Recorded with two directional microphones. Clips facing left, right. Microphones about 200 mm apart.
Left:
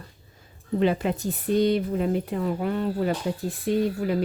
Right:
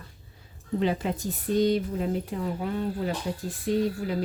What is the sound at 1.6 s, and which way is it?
Speech, 65° left (ahead or behind).